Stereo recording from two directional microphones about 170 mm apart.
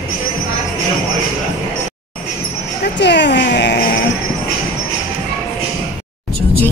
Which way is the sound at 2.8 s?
90° left.